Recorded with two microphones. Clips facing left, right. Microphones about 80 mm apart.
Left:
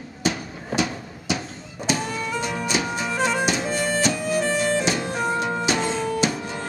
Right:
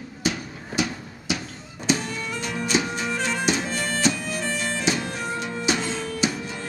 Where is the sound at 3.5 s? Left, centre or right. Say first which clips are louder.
Left 3 dB; centre.